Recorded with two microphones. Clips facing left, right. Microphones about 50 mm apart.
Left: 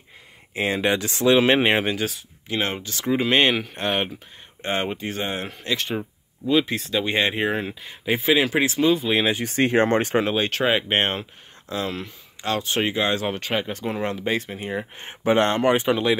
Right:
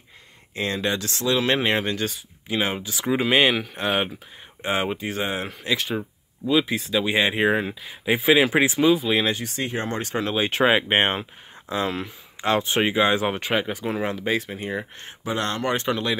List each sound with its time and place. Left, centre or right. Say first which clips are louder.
0.6 s speech: left 3 dB; centre
1.5 s speech: left 3 dB; centre
2.4 s speech: right 1 dB; centre
5.9 s a sound: even; centre
6.6 s speech: right 1 dB; centre
9.5 s speech: left 9 dB; left
10.5 s speech: right 2 dB; centre
13.6 s speech: right 1 dB; centre
15.0 s speech: left 8 dB; left
15.7 s speech: left 4 dB; centre